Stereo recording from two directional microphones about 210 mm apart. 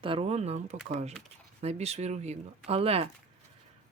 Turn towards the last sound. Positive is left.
turn(degrees=-30)  # may be behind; listen again after turning